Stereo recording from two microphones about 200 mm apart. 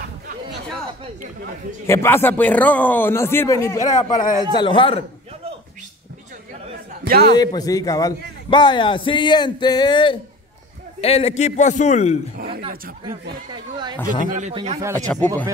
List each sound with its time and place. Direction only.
1.9 s a man's voice: 10° left (ahead or behind)
7.1 s a man's voice: 55° right (ahead or behind)
7.3 s a man's voice: 20° left (ahead or behind); by 12.2 s 35° left (ahead or behind)
12.4 s a man's voice: 45° right (ahead or behind)
14.2 s speech: 40° right (ahead or behind)
14.5 s a man's voice: 25° right (ahead or behind)
15.0 s a man's voice: 10° left (ahead or behind)